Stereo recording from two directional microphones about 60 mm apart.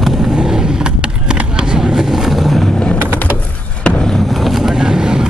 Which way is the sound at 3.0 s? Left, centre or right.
Right.